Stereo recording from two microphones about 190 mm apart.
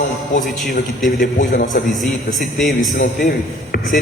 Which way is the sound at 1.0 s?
45° left (ahead or behind).